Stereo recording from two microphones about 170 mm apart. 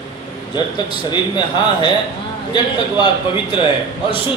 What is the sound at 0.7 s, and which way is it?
Speech, 25° left (ahead or behind).